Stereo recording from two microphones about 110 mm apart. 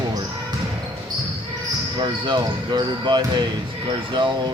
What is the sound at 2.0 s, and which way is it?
Speech, 40° right (ahead or behind).